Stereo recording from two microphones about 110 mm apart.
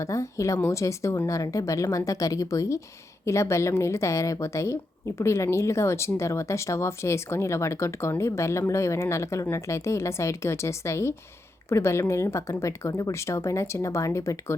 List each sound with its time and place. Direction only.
0.0 s a woman's voice: 30° left (ahead or behind)